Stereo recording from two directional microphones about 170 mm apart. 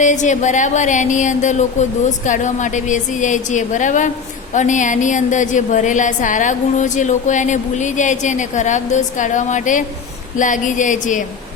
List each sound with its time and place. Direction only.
0.0 s a woman's voice: 45° left (ahead or behind)